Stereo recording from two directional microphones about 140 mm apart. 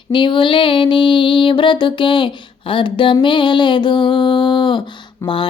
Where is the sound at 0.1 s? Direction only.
35° left (ahead or behind).